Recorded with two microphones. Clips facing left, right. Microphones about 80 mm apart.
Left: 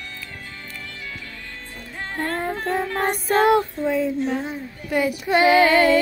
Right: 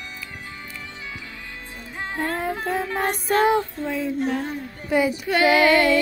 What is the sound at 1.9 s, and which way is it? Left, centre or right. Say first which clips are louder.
Music: even; centre.